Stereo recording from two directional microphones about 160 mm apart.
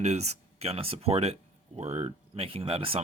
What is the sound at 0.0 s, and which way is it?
Speech, 45° right (ahead or behind).